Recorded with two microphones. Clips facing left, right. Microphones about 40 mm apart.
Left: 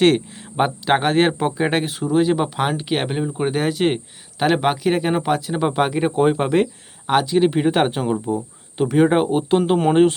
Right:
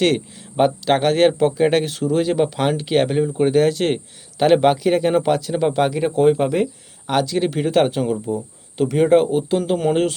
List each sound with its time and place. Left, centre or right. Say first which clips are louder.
0.5 s speech: right 1 dB; centre
9.3 s speech: left 2 dB; left